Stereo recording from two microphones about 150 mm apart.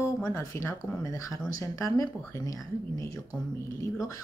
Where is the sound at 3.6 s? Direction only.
20° left (ahead or behind).